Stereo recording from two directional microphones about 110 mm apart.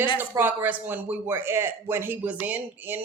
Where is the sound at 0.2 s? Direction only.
15° right (ahead or behind).